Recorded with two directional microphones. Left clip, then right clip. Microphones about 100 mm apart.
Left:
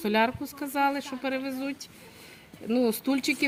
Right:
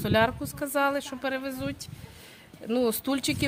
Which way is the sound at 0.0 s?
40° right (ahead or behind).